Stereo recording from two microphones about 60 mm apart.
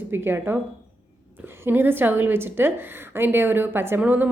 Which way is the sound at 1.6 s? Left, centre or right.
Right.